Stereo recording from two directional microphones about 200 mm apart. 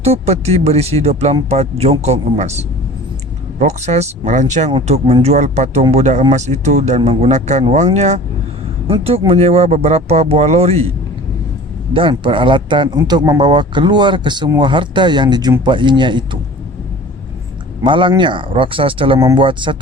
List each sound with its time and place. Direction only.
0.0 s speech: 30° right (ahead or behind)
11.9 s speech: 25° right (ahead or behind)
17.8 s speech: 25° right (ahead or behind)